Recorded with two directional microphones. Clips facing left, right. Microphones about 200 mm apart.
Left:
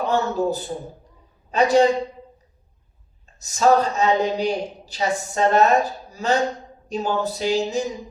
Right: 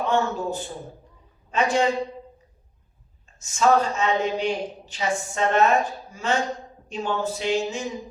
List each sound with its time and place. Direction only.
0.0 s a woman's voice: 35° left (ahead or behind)
3.3 s a woman's voice: 40° left (ahead or behind)